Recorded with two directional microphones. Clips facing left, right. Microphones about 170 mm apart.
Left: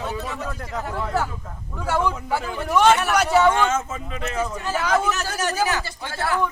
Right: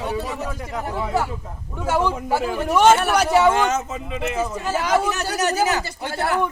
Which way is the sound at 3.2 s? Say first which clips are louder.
Right 1 dB; 10° right (ahead or behind).